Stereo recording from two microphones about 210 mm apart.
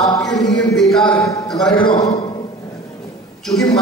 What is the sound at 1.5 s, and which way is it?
Speech, centre (ahead or behind).